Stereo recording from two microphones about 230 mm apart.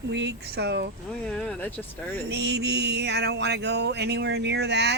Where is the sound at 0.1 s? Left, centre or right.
Right.